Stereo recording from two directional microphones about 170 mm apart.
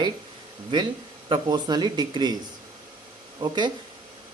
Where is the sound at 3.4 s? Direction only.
25° right (ahead or behind).